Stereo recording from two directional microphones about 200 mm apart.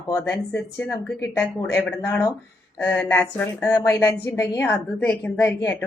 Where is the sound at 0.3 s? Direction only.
10° left (ahead or behind).